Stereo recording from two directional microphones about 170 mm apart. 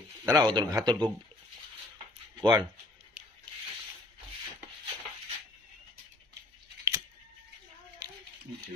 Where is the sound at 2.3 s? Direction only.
25° right (ahead or behind).